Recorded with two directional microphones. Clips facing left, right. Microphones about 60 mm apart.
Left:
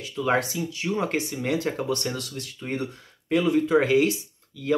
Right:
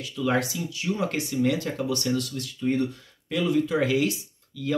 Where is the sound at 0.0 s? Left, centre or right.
Left.